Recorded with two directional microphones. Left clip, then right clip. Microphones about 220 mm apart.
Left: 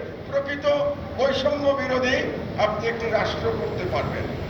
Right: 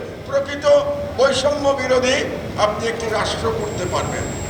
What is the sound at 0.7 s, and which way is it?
A man's voice, 60° right (ahead or behind).